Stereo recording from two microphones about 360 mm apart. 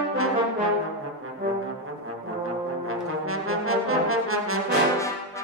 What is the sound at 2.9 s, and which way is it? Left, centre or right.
Brass instrument, right.